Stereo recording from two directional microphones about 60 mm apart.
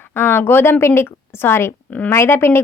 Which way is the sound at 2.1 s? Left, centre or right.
Left.